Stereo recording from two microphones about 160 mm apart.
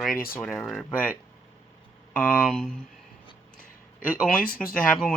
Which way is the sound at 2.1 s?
5° left (ahead or behind).